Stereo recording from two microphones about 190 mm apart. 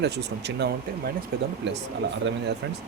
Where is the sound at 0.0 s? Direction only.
65° right (ahead or behind).